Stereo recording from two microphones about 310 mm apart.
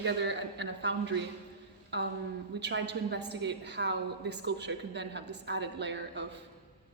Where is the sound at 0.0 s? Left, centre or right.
Right.